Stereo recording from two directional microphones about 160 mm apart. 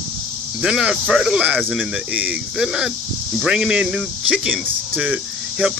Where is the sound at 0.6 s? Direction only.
5° right (ahead or behind).